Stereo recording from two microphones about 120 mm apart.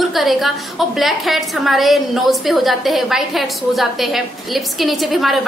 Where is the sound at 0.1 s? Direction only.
Centre (ahead or behind).